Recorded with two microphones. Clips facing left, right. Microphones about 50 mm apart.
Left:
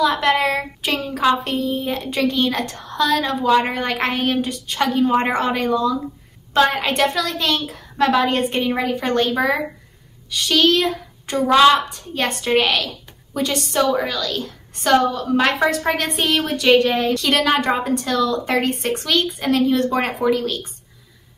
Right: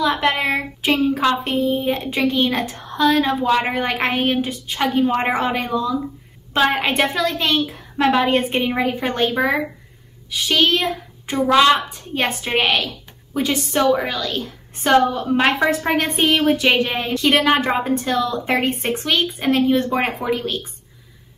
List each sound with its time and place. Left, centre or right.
0.0 s a woman's voice: centre